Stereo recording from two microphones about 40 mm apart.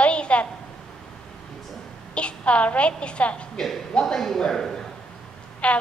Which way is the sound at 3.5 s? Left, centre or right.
Centre.